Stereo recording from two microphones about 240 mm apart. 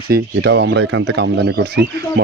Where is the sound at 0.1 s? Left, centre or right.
Right.